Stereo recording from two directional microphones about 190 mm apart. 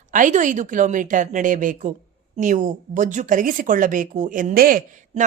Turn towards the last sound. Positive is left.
turn(degrees=-45)  # may be behind; listen again after turning